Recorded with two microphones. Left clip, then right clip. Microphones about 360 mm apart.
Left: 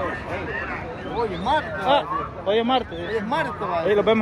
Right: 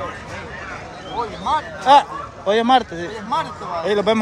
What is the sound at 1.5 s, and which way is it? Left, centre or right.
A man's voice, centre.